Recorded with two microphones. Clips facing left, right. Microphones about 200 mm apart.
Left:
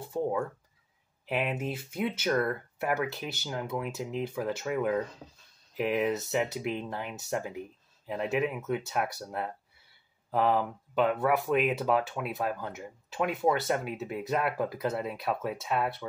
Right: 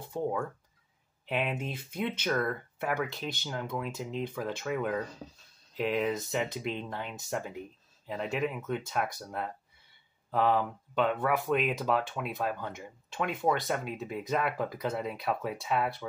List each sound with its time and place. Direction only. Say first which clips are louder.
0.1 s speech: left 2 dB; 5° left (ahead or behind)